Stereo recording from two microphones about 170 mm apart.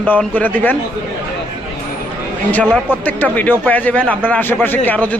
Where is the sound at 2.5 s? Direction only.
5° left (ahead or behind).